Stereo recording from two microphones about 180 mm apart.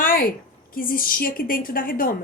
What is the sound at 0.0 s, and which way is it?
A woman's voice, 55° left (ahead or behind).